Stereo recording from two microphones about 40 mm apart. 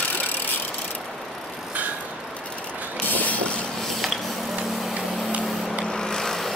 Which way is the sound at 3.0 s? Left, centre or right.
Left.